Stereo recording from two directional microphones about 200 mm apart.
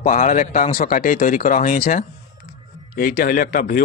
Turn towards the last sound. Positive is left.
turn(degrees=45)  # may be behind; listen again after turning